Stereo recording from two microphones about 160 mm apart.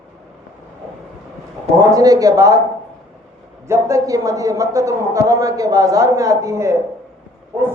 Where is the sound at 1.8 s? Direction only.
20° right (ahead or behind).